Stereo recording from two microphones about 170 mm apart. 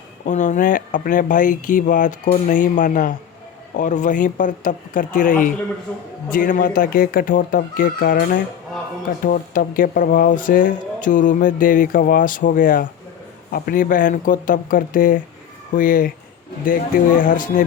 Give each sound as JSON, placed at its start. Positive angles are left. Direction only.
{"t": 0.3, "sound": "speech", "side_deg": 45}
{"t": 17.2, "sound": "speech", "side_deg": 50}